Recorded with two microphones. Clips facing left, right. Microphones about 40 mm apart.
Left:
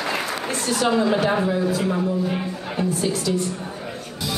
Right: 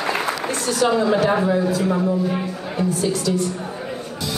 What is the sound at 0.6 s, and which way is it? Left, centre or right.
A woman's voice, centre.